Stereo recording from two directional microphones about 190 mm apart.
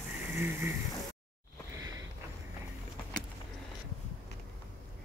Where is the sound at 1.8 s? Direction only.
15° right (ahead or behind).